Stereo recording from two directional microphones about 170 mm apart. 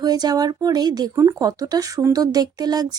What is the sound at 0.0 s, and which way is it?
Speech, 25° right (ahead or behind).